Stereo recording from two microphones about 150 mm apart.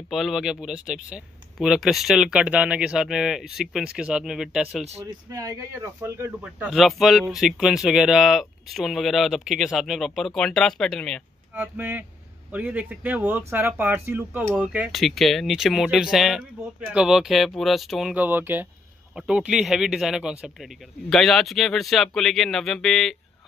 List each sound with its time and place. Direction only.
0.1 s speech: centre (ahead or behind)
5.0 s speech: 20° right (ahead or behind)
6.4 s speech: centre (ahead or behind)
11.5 s speech: 15° right (ahead or behind)
14.9 s speech: centre (ahead or behind)
18.1 s speech: 10° right (ahead or behind)